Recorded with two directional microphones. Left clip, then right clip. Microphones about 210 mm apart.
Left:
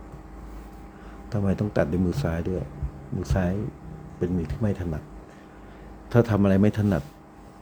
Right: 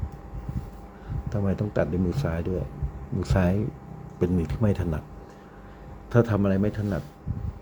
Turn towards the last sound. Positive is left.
turn(degrees=10)  # may be behind; listen again after turning